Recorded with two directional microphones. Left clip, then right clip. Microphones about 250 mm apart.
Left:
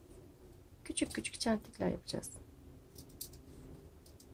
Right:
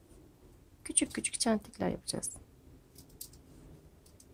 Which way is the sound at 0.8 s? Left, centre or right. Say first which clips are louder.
Right 3 dB; centre.